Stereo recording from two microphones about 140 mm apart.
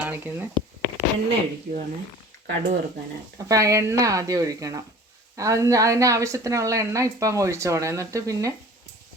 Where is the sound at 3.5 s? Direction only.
25° right (ahead or behind).